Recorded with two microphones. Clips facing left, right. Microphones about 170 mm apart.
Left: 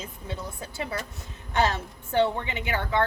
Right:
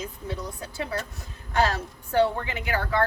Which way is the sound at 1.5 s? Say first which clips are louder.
Right 1 dB; 20° left (ahead or behind).